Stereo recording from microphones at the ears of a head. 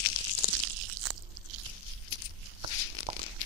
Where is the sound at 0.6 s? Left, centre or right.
Right.